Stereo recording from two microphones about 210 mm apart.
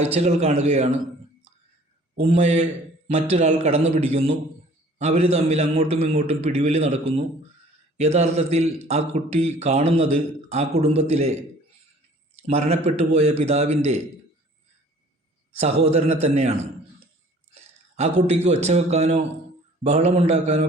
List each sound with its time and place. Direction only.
0.0 s a man's voice: 30° right (ahead or behind)
2.1 s a man's voice: 30° right (ahead or behind)
12.4 s a man's voice: 30° right (ahead or behind)
15.5 s a man's voice: 30° right (ahead or behind)